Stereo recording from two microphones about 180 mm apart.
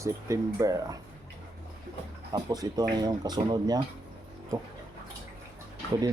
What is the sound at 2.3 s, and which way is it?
Speech, 20° right (ahead or behind).